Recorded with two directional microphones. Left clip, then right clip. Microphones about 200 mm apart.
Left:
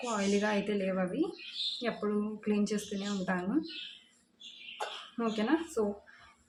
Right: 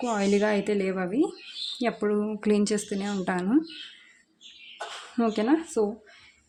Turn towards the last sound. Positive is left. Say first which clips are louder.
# right 6 dB
turn(degrees=-45)  # may be behind; listen again after turning